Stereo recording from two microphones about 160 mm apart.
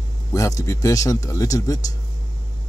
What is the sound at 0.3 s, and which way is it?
Speech, 20° left (ahead or behind).